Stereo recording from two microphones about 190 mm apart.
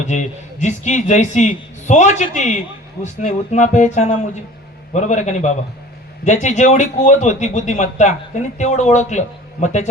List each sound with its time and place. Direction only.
0.0 s speech: 40° left (ahead or behind)